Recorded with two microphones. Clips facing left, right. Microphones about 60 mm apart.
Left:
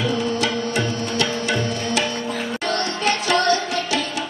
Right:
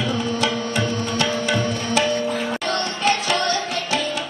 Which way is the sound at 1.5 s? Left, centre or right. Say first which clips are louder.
Right 1 dB; right.